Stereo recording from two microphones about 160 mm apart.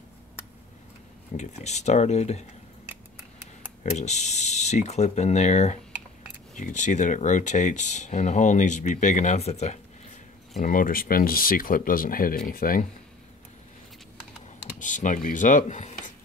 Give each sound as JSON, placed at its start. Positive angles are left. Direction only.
{"t": 1.3, "sound": "speech", "side_deg": 45}
{"t": 3.9, "sound": "speech", "side_deg": 45}
{"t": 10.6, "sound": "speech", "side_deg": 60}
{"t": 14.8, "sound": "speech", "side_deg": 50}